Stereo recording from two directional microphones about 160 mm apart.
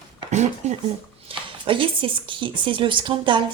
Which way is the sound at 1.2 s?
35° right (ahead or behind).